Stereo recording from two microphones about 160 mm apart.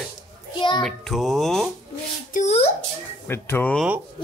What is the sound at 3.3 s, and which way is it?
Speech, 15° left (ahead or behind).